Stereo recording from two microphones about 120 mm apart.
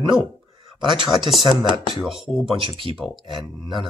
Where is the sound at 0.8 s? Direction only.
40° right (ahead or behind).